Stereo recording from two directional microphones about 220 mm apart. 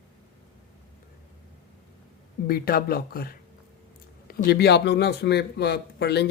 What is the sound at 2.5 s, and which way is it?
Speech, 40° left (ahead or behind).